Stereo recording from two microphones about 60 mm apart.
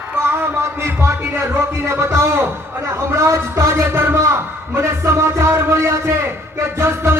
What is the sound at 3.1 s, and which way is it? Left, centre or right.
Music, right.